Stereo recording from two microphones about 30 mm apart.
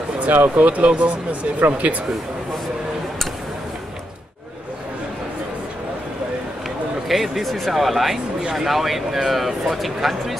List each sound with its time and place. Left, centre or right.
0.2 s speech: right
1.6 s speech: right
7.1 s speech: centre